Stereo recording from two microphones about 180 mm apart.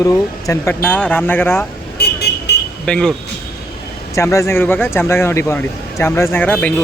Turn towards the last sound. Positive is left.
turn(degrees=10)  # may be behind; listen again after turning